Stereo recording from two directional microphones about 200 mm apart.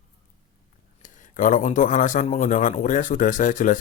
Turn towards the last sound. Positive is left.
turn(degrees=40)  # may be behind; listen again after turning